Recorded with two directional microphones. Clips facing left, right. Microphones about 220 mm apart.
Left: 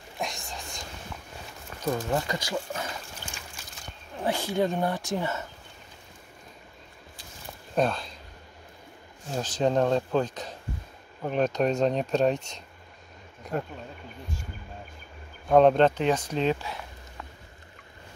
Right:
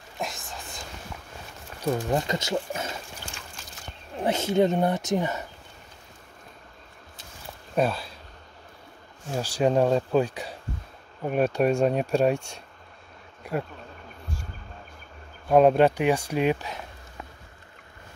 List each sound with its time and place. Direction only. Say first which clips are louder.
0.2 s whispering: even; centre (ahead or behind)
1.8 s speech: right 2 dB; 15° right (ahead or behind)
4.2 s speech: right 4 dB; 20° right (ahead or behind)
7.7 s speech: right 1 dB; 5° right (ahead or behind)
9.3 s speech: right 2 dB; 10° right (ahead or behind)
15.5 s speech: right 1 dB; 10° right (ahead or behind)